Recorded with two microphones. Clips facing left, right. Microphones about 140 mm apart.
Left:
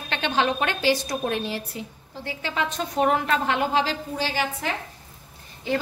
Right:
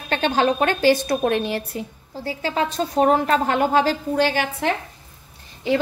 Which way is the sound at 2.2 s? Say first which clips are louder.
Right 5 dB; 35° right (ahead or behind).